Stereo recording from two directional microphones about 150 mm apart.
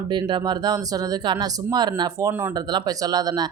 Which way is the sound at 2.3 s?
15° right (ahead or behind).